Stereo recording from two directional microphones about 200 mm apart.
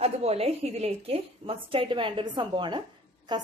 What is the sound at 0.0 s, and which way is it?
A woman's voice, 30° right (ahead or behind).